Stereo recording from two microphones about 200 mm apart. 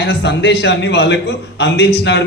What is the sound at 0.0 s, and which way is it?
A man's voice, 60° left (ahead or behind).